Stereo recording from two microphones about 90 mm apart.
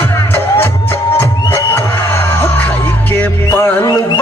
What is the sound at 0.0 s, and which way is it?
Music, 25° left (ahead or behind).